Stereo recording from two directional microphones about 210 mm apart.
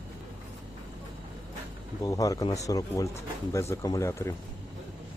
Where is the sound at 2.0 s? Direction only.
15° left (ahead or behind).